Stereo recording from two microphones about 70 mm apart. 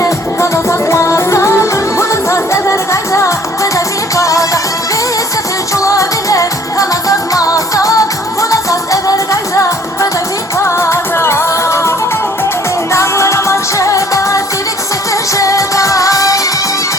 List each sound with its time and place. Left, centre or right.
0.0 s music: left
5.7 s music: left